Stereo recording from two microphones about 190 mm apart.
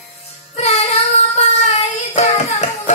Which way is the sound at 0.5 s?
35° left (ahead or behind).